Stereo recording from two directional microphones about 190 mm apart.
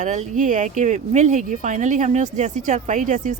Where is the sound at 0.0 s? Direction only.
40° right (ahead or behind).